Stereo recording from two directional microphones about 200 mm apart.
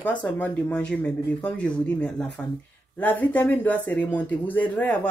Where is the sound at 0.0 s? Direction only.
5° left (ahead or behind).